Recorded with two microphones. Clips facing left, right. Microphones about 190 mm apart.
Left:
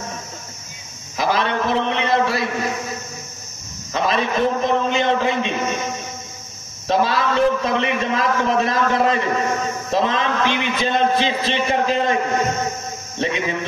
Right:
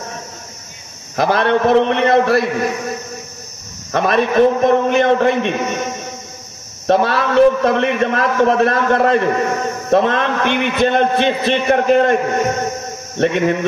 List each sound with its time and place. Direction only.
1.1 s a man's voice: 60° right (ahead or behind)
3.9 s a man's voice: 60° right (ahead or behind)
6.9 s a man's voice: 60° right (ahead or behind)
13.2 s a man's voice: 60° right (ahead or behind)